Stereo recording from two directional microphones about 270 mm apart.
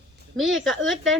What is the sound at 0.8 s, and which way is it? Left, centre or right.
Speech, right.